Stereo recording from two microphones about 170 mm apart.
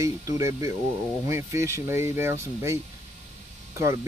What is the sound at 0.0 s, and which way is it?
Speech, 20° right (ahead or behind).